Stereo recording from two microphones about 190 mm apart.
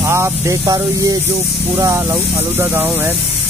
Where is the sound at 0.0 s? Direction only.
15° right (ahead or behind).